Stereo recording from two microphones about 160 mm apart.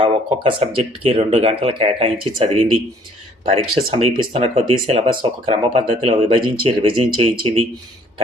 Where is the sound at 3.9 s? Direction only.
35° right (ahead or behind).